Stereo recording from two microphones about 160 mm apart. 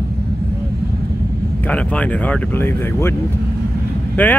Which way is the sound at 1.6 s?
10° left (ahead or behind).